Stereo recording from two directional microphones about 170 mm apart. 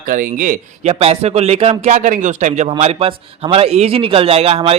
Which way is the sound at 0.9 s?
35° right (ahead or behind).